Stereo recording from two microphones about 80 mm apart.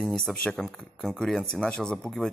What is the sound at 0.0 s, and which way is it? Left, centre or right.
Speech, centre.